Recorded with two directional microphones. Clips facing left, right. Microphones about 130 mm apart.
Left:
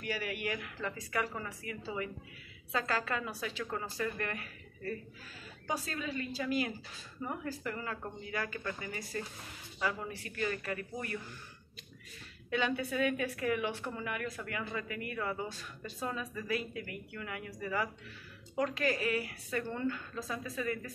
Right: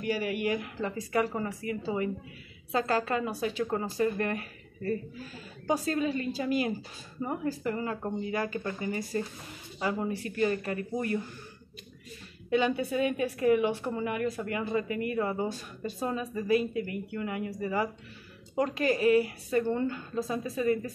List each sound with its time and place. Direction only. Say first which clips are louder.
0.0 s speech: right 8 dB; 25° right (ahead or behind)
3.3 s speech: right 8 dB; 20° right (ahead or behind); by 6.2 s 35° right (ahead or behind)
7.2 s speech: right 7 dB; 25° right (ahead or behind)
12.4 s speech: right 6 dB; 20° right (ahead or behind)
15.4 s speech: right 9 dB; 15° right (ahead or behind)
16.1 s speech: right 9 dB; 25° right (ahead or behind)